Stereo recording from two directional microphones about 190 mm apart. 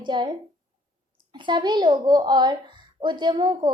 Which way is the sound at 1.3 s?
25° right (ahead or behind).